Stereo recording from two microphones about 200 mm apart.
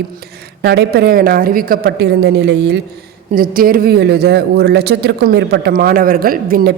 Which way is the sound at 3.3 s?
45° right (ahead or behind).